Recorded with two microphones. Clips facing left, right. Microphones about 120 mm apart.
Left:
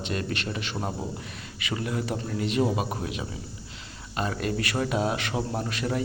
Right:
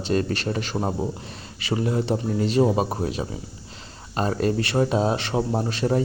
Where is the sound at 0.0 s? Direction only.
35° right (ahead or behind).